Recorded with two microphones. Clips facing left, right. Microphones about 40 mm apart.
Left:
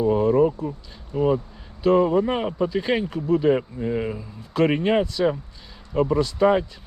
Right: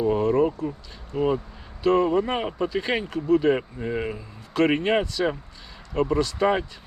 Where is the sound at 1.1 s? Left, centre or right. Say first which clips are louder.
Left 2 dB; right.